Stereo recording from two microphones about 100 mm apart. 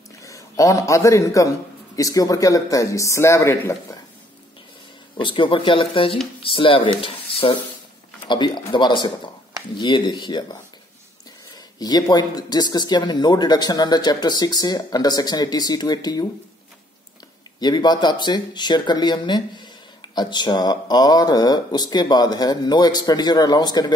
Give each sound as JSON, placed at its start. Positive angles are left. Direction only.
{"t": 0.2, "sound": "a man's voice", "side_deg": 35}
{"t": 5.1, "sound": "speech", "side_deg": 55}
{"t": 8.3, "sound": "speech", "side_deg": 50}
{"t": 17.6, "sound": "speech", "side_deg": 45}